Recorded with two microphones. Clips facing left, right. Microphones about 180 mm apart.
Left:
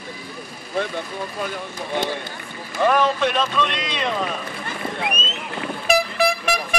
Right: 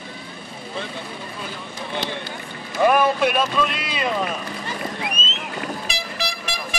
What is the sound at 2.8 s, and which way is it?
Speech, 10° right (ahead or behind).